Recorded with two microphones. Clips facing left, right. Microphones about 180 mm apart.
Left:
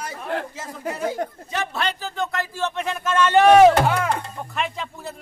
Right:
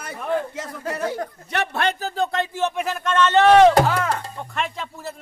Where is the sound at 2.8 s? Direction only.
5° left (ahead or behind).